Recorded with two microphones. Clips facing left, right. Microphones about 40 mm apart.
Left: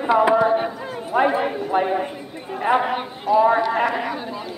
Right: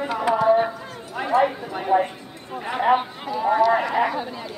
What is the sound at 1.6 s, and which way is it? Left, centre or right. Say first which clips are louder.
Music: even; left.